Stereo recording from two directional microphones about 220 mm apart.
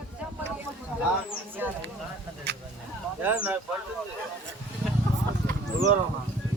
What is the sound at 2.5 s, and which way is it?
Speech, 55° right (ahead or behind).